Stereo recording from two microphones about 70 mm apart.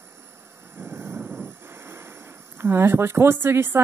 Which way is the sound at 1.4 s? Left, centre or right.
Right.